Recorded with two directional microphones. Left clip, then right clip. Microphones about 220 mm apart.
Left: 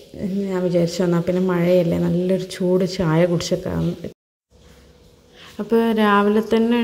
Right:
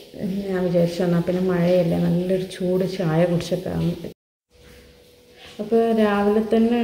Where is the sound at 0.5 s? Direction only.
35° left (ahead or behind).